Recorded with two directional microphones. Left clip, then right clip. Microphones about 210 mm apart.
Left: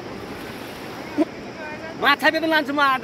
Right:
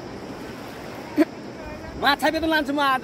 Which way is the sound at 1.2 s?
15° right (ahead or behind).